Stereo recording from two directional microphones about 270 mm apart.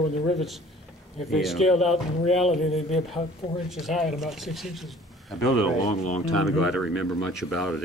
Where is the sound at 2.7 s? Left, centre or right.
Left.